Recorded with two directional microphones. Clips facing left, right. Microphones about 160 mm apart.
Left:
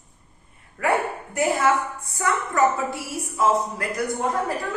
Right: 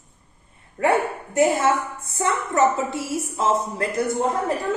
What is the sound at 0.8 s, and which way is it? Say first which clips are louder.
Speech: right 3 dB; 25° right (ahead or behind).